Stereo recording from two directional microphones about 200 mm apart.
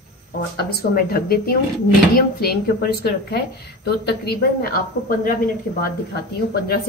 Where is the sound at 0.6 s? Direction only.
50° left (ahead or behind).